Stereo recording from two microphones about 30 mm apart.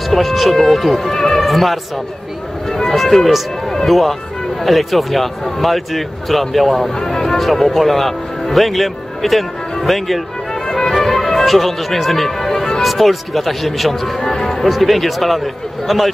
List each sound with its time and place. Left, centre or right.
0.1 s speech: centre
1.5 s speech: centre
2.7 s speech: centre
3.0 s speech: centre
7.0 s speech: centre
7.3 s speech: centre
10.5 s music: centre
12.8 s speech: centre
14.6 s speech: centre